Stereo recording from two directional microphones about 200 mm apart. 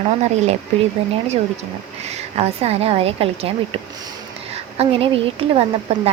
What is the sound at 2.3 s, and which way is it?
A woman's voice, 30° right (ahead or behind).